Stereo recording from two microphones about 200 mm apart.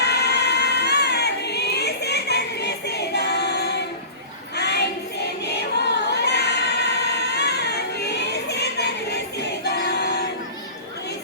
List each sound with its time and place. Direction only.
0.0 s crowd: 55° left (ahead or behind)
4.5 s child singing: 55° left (ahead or behind)
5.5 s choir: 55° left (ahead or behind)